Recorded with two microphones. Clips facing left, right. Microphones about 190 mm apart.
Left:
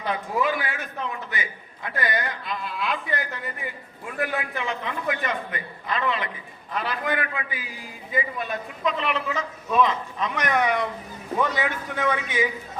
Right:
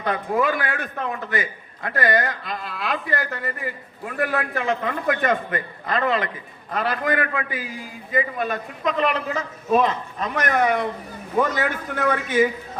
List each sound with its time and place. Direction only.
0.0 s a man's voice: 55° right (ahead or behind)
4.6 s a man's voice: 50° right (ahead or behind)